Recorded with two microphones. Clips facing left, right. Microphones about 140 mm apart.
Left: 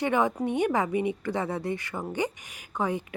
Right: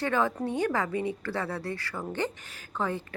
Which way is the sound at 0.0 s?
15° left (ahead or behind).